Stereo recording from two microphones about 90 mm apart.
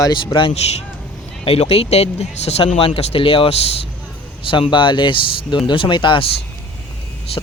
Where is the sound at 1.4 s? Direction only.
90° left.